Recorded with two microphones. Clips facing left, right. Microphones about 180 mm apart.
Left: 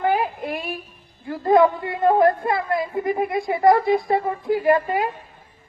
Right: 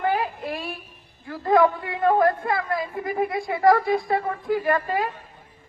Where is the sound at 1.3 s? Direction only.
25° left (ahead or behind).